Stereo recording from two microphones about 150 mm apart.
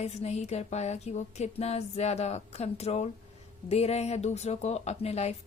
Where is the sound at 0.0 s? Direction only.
45° left (ahead or behind).